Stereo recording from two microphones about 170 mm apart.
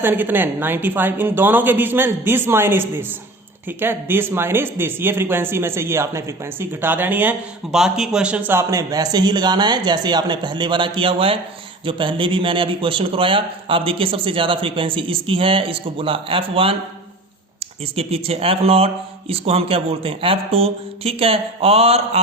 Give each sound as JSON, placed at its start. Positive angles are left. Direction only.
{"t": 0.0, "sound": "a man's voice", "side_deg": -10}